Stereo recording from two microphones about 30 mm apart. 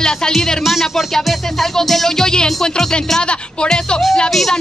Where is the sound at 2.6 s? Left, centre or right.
Left.